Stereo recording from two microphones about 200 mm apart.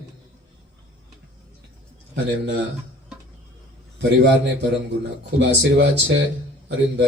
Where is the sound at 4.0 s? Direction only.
55° right (ahead or behind).